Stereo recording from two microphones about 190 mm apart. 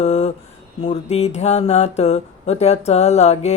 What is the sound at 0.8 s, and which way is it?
Speech, 35° left (ahead or behind).